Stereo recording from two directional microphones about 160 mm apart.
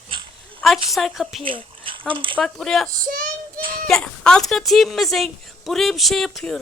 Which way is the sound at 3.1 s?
60° right (ahead or behind).